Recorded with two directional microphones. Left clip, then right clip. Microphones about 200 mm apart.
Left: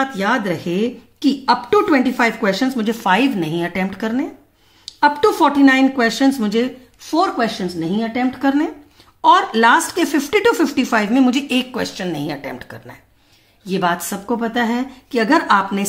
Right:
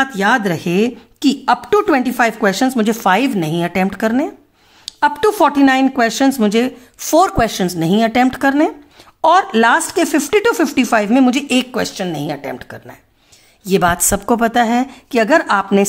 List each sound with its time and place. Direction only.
0.0 s speech: 35° right (ahead or behind)
7.0 s speech: 50° right (ahead or behind); by 12.9 s 25° right (ahead or behind)
13.7 s speech: 40° right (ahead or behind)